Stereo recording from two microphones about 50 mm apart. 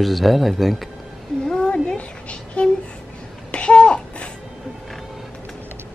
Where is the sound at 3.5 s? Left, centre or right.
Left.